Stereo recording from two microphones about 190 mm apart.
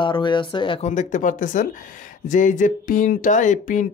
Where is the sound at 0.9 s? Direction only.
40° left (ahead or behind).